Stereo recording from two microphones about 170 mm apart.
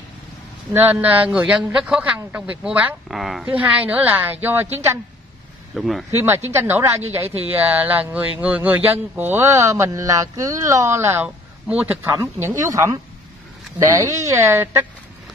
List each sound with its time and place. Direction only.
0.7 s a man's voice: 15° right (ahead or behind)
5.8 s speech: centre (ahead or behind)
6.1 s a man's voice: 15° right (ahead or behind)